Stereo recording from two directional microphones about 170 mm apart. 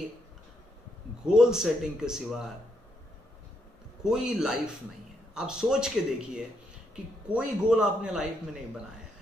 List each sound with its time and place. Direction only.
1.2 s a man's voice: 5° right (ahead or behind)
4.0 s a man's voice: 5° right (ahead or behind)